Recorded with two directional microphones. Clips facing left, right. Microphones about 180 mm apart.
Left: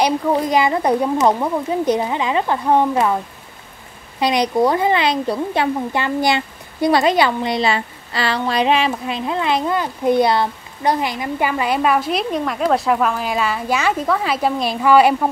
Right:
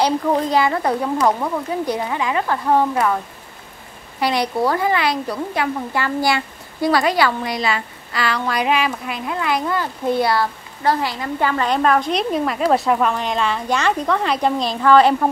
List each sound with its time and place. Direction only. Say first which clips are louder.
0.0 s speech: left 1 dB; 10° left (ahead or behind)
4.2 s speech: left 3 dB; 20° left (ahead or behind)